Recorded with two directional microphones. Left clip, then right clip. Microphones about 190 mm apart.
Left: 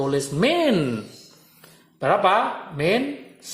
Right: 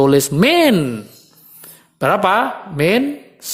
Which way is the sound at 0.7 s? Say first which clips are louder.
Right 4 dB; 20° right (ahead or behind).